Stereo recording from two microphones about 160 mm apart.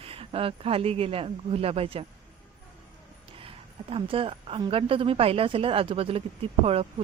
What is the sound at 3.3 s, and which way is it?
A woman's voice, 35° right (ahead or behind).